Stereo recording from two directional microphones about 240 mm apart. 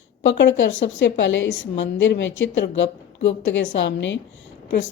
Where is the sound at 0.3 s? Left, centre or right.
Left.